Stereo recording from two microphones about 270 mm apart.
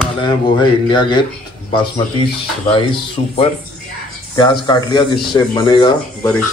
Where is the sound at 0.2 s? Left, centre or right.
Centre.